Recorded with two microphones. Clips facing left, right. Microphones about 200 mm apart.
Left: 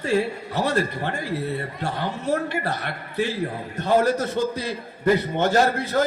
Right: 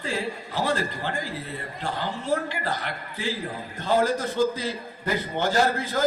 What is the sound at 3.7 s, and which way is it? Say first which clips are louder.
A man's voice: left 3 dB; 75° left (ahead or behind).